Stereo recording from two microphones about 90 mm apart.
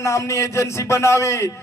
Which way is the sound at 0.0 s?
35° left (ahead or behind).